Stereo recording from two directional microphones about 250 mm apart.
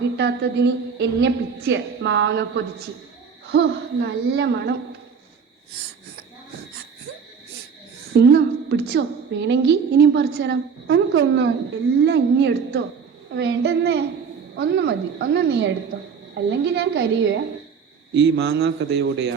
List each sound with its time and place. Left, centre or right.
0.2 s a woman's voice: right
8.1 s a woman's voice: right